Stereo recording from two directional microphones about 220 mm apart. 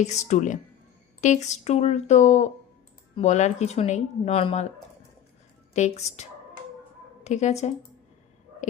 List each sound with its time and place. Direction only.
0.0 s speech: 30° left (ahead or behind)
5.7 s speech: 30° left (ahead or behind)
7.3 s speech: 30° left (ahead or behind)